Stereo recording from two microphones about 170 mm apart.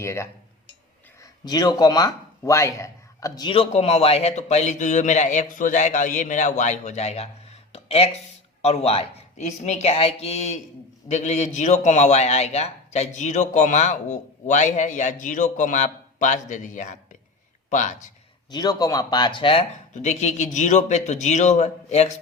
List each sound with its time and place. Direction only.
0.0 s a man's voice: 15° left (ahead or behind); by 17.9 s 45° left (ahead or behind)
18.5 s speech: 25° left (ahead or behind)
19.9 s a man's voice: 45° left (ahead or behind)